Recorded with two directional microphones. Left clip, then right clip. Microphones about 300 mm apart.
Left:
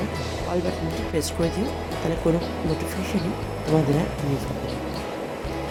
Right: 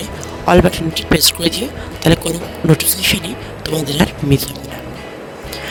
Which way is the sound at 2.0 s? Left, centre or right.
Right.